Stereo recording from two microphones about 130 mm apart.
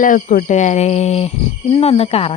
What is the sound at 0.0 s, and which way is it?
Speech, 90° left.